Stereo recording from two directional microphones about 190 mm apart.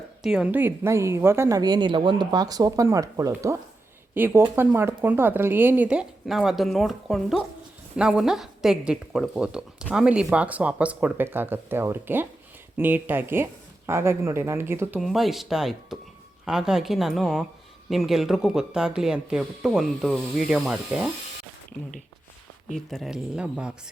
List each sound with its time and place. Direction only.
0.2 s a woman's voice: 5° right (ahead or behind)
22.7 s speech: centre (ahead or behind)